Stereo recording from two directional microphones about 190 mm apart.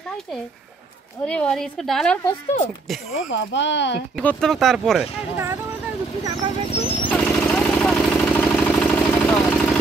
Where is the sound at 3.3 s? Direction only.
75° left (ahead or behind).